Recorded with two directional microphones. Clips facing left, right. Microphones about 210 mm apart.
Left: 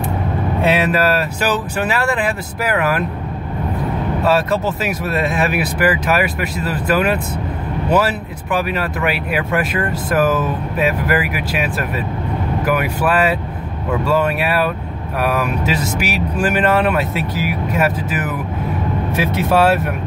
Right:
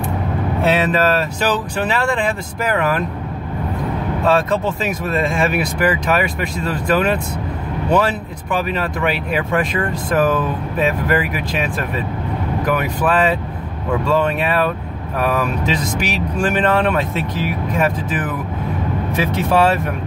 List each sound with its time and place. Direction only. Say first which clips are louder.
0.7 s speech: even; 10° left (ahead or behind)
4.2 s speech: even; 5° left (ahead or behind)
19.3 s speech: left 1 dB; 5° left (ahead or behind)